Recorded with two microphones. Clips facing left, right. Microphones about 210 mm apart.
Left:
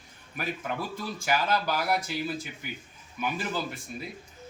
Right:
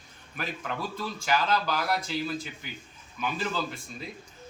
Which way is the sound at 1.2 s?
10° left (ahead or behind).